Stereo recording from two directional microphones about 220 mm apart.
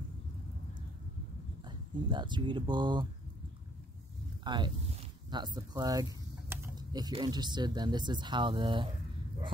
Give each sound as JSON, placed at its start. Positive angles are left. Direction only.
{"t": 1.7, "sound": "speech", "side_deg": -20}
{"t": 4.5, "sound": "speech", "side_deg": -20}